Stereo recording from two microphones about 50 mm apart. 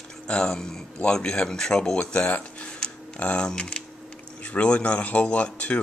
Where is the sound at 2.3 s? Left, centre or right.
Left.